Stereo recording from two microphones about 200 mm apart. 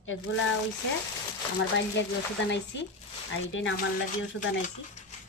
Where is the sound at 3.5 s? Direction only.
75° left (ahead or behind).